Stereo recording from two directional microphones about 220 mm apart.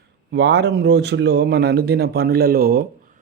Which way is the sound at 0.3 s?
50° right (ahead or behind).